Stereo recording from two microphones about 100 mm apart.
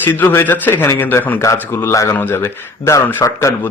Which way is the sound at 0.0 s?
20° left (ahead or behind).